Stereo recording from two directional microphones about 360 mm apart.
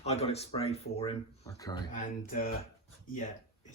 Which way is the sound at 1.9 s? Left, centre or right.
Left.